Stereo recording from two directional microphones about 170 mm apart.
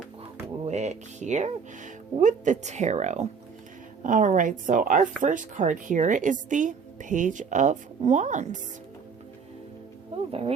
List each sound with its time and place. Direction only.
0.6 s speech: 40° right (ahead or behind)